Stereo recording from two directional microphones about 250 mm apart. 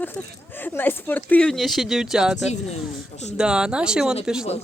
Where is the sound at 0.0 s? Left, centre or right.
Centre.